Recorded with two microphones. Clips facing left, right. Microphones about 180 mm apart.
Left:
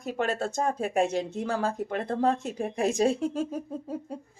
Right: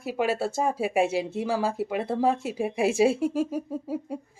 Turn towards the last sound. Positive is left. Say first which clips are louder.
# right 3 dB
turn(degrees=-10)  # may be behind; listen again after turning